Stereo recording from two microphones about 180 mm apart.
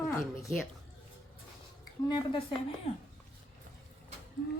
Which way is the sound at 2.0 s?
25° left (ahead or behind).